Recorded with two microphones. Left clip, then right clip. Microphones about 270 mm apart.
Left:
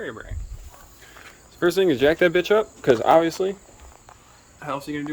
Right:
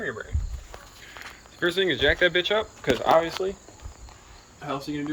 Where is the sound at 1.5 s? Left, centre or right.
Left.